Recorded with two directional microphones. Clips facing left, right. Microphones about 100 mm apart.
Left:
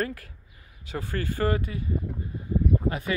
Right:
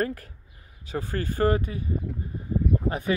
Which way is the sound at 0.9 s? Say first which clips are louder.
Right 2 dB; 25° right (ahead or behind).